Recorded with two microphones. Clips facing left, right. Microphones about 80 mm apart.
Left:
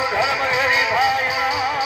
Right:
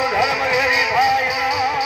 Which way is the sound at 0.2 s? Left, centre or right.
Left.